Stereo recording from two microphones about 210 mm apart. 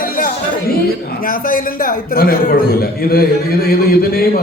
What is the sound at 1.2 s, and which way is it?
A man's voice, 40° left (ahead or behind).